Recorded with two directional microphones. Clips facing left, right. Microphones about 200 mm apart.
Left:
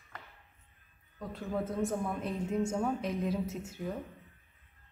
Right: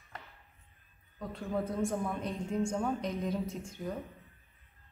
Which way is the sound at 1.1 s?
Centre (ahead or behind).